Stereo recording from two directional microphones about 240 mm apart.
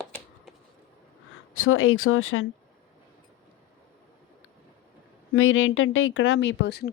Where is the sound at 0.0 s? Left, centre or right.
Centre.